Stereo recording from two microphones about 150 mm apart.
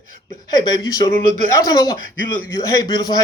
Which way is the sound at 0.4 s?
25° left (ahead or behind).